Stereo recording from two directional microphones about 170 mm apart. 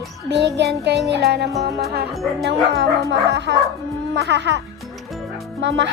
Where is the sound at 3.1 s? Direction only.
90° right.